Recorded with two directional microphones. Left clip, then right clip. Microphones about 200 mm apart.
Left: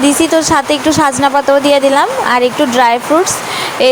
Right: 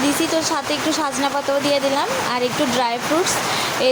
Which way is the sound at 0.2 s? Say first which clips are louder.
Left 10 dB; 35° left (ahead or behind).